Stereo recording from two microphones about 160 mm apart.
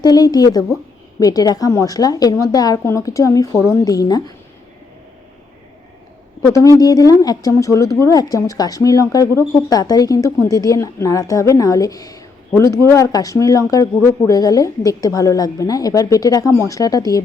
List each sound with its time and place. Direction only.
0.0 s speech: 25° left (ahead or behind)
6.4 s speech: 20° left (ahead or behind)